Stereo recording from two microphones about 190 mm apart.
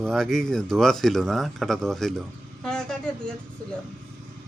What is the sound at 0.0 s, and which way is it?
A man's voice, centre (ahead or behind).